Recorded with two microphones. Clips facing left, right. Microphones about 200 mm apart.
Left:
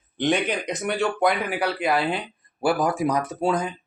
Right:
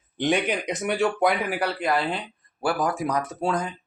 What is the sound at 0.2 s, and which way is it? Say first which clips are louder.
Speech: left 1 dB; 5° right (ahead or behind).